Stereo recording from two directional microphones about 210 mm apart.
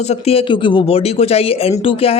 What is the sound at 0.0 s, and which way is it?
A man's voice, 30° left (ahead or behind).